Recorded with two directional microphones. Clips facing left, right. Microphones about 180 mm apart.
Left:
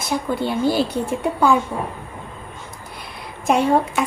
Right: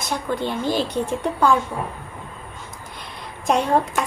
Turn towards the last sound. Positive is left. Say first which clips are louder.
# left 2 dB
turn(degrees=5)  # may be behind; listen again after turning